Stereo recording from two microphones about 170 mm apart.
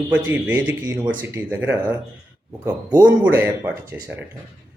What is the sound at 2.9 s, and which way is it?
Speech, 25° right (ahead or behind).